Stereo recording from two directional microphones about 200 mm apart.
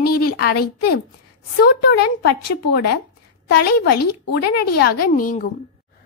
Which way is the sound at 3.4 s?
55° left (ahead or behind).